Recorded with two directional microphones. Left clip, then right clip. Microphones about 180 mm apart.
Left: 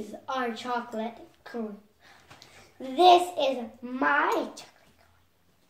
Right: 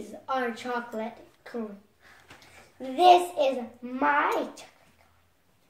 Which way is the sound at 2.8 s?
15° left (ahead or behind).